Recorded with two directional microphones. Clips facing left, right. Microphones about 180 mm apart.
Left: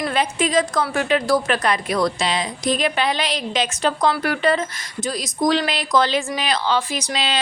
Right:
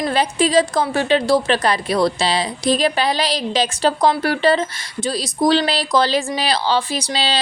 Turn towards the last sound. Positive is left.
turn(degrees=-30)  # may be behind; listen again after turning